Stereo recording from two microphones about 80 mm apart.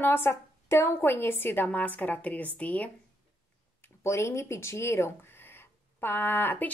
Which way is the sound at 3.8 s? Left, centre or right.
Left.